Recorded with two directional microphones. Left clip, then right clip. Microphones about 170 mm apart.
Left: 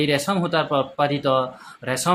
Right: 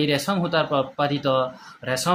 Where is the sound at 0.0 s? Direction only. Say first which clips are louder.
Left 2 dB; 10° left (ahead or behind).